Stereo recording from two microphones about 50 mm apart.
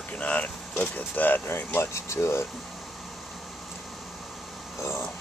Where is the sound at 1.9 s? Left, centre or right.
Left.